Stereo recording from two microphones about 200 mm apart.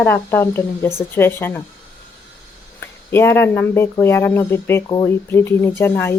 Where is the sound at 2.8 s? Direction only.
10° left (ahead or behind).